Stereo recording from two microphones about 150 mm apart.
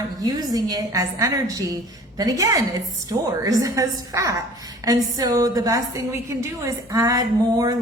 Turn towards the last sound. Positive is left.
turn(degrees=-25)  # may be behind; listen again after turning